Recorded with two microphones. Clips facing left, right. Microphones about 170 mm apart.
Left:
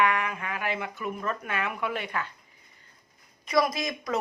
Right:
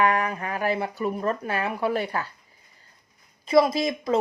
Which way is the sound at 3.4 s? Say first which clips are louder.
Right 6 dB; 30° right (ahead or behind).